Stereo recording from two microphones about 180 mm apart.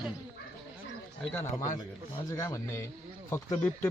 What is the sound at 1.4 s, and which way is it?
Speech, 45° left (ahead or behind).